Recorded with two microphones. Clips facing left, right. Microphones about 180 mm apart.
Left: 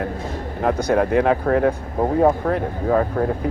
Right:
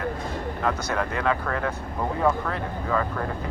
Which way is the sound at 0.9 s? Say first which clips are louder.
Left 9 dB; 55° left (ahead or behind).